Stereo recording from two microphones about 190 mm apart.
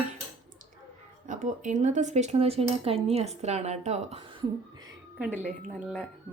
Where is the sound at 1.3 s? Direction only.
40° right (ahead or behind).